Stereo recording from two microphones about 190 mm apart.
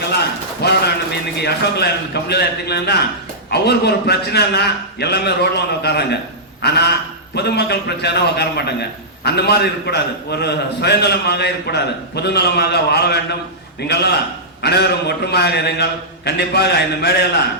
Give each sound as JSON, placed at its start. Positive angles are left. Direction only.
{"t": 0.6, "sound": "a man's voice", "side_deg": 60}